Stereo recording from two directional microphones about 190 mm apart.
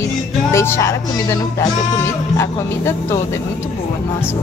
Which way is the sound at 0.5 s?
15° left (ahead or behind).